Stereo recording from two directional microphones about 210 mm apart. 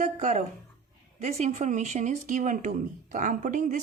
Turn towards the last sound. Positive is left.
turn(degrees=-40)  # may be behind; listen again after turning